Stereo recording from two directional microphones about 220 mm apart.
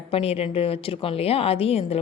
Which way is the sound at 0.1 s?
25° left (ahead or behind).